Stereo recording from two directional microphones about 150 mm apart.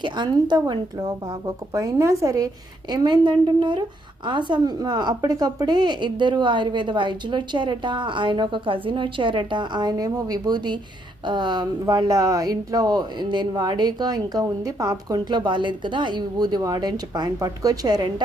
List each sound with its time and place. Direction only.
0.0 s speech: 30° right (ahead or behind)